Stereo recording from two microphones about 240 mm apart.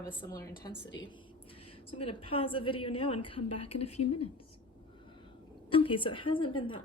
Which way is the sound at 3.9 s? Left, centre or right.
Left.